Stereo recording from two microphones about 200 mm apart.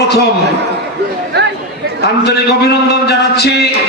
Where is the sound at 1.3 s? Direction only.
55° right (ahead or behind).